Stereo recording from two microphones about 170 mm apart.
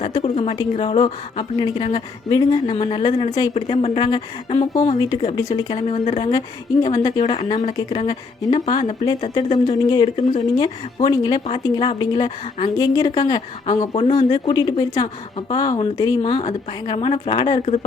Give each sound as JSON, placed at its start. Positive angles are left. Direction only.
{"t": 0.0, "sound": "a woman's voice", "side_deg": 40}
{"t": 3.5, "sound": "a woman's voice", "side_deg": 40}
{"t": 5.7, "sound": "a woman's voice", "side_deg": 35}
{"t": 7.3, "sound": "a woman's voice", "side_deg": 40}
{"t": 7.8, "sound": "speech", "side_deg": 25}
{"t": 13.9, "sound": "a woman's voice", "side_deg": 35}